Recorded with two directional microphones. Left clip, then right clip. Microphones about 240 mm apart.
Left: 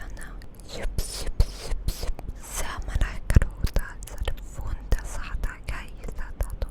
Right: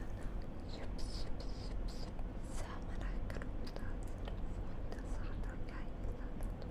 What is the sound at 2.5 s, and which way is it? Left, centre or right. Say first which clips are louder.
Whispering: left 16 dB; left.